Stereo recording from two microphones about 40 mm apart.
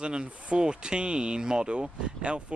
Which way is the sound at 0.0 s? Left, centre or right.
Right.